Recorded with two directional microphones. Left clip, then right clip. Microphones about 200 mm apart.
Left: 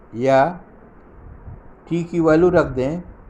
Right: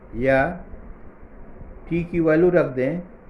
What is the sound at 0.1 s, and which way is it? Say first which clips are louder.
Speech: left 4 dB; 25° left (ahead or behind).